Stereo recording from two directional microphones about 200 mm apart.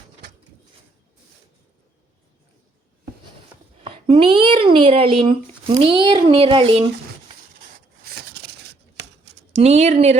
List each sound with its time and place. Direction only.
3.8 s speech: 25° right (ahead or behind)
9.6 s speech: 35° right (ahead or behind)